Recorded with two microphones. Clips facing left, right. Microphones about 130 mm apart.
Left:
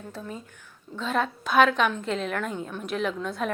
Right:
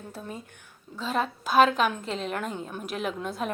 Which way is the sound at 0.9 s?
Centre (ahead or behind).